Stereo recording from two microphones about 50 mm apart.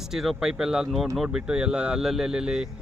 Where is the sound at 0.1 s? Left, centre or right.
Centre.